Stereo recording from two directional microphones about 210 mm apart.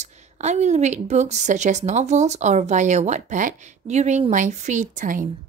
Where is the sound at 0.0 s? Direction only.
35° right (ahead or behind).